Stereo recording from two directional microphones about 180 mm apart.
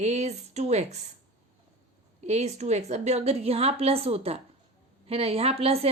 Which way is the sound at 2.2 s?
40° right (ahead or behind).